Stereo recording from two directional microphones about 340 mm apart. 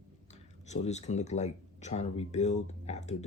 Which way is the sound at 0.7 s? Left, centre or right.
Centre.